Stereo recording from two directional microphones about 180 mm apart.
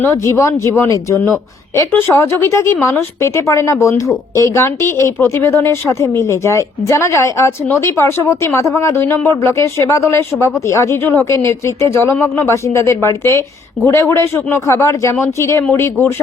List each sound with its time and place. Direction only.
0.0 s speech: 15° left (ahead or behind)